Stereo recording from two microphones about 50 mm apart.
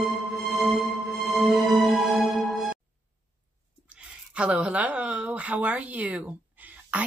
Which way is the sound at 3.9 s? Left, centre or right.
Right.